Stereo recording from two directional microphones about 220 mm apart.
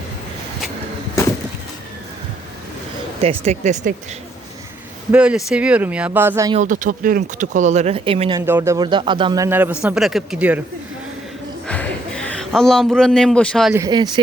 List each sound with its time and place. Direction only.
3.2 s speech: 30° right (ahead or behind)
5.1 s speech: 5° right (ahead or behind)
6.5 s speech: 35° right (ahead or behind)
8.4 s a man's voice: 10° right (ahead or behind)
11.7 s a sound: 5° left (ahead or behind)
13.7 s a man's voice: 15° right (ahead or behind)